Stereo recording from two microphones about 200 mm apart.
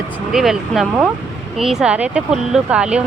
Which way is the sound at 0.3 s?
Centre (ahead or behind).